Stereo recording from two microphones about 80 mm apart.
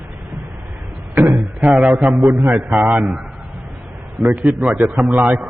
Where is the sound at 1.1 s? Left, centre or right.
Right.